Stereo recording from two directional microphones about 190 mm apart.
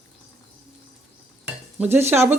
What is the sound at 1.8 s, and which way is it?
Speech, 10° right (ahead or behind).